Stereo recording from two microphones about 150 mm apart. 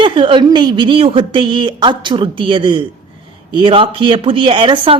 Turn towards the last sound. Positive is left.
turn(degrees=-35)  # may be behind; listen again after turning